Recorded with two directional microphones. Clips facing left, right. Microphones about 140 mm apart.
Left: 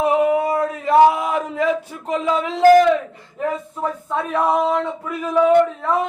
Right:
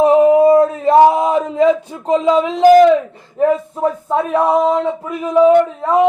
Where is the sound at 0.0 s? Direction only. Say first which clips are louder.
Right 8 dB; 30° right (ahead or behind).